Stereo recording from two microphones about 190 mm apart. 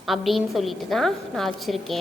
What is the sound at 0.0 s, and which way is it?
A woman's voice, centre (ahead or behind).